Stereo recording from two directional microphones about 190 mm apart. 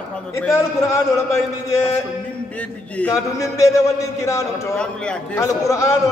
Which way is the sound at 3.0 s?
15° left (ahead or behind).